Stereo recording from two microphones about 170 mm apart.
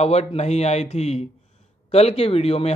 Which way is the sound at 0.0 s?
40° left (ahead or behind).